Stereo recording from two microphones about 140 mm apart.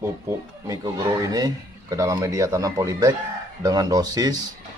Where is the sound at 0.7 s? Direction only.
25° right (ahead or behind).